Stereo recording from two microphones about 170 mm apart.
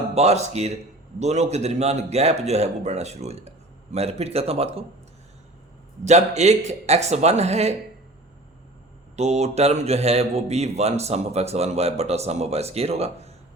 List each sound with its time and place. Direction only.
0.1 s speech: 40° right (ahead or behind)
6.1 s speech: 40° right (ahead or behind)
9.1 s speech: 40° right (ahead or behind)